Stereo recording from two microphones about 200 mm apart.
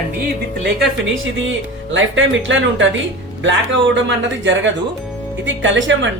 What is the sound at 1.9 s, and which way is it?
Speech, 70° right (ahead or behind).